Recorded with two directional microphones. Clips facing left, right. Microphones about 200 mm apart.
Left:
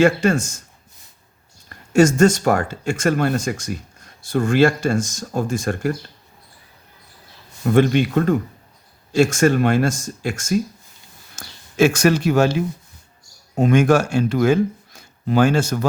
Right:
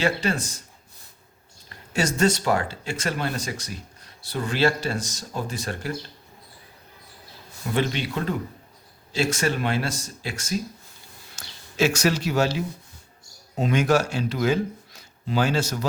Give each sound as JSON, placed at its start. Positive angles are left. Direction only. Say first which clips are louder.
{"t": 0.0, "sound": "speech", "louder": "left 9 dB", "side_deg": 50}
{"t": 1.7, "sound": "speech", "louder": "left 11 dB", "side_deg": 50}
{"t": 7.6, "sound": "speech", "louder": "left 10 dB", "side_deg": 50}